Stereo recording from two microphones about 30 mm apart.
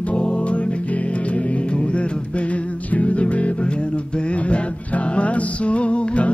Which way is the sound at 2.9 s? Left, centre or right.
Left.